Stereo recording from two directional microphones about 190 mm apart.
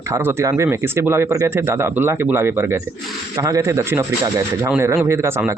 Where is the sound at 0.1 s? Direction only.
10° right (ahead or behind).